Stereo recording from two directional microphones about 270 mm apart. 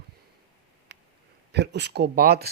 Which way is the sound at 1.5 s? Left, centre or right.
Right.